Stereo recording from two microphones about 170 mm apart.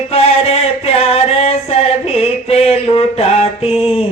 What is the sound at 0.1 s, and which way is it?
Music, 35° left (ahead or behind).